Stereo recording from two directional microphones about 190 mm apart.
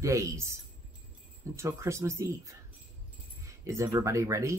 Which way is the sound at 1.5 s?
15° right (ahead or behind).